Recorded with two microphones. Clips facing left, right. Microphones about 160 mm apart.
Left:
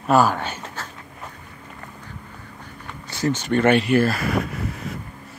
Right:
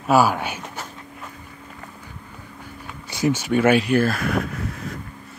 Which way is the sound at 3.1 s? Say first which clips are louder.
Right 1 dB; 10° right (ahead or behind).